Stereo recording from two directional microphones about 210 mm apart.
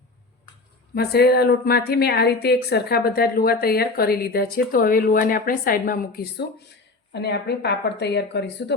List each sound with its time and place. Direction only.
0.9 s a woman's voice: 50° left (ahead or behind)
7.1 s a woman's voice: 55° left (ahead or behind)